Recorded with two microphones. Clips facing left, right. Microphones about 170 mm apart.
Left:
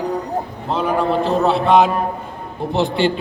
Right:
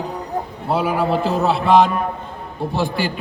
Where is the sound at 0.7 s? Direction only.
10° right (ahead or behind).